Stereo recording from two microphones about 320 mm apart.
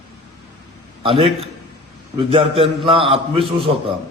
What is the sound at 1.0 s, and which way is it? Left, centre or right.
A man's voice, centre.